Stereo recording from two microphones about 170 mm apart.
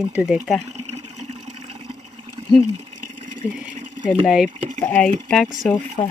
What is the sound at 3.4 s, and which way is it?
Speech, 5° right (ahead or behind).